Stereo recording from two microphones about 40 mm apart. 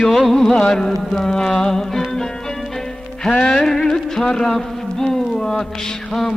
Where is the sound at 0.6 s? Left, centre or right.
Centre.